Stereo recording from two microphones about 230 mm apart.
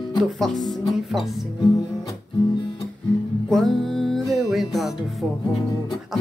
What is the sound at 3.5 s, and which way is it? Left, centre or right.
Music, centre.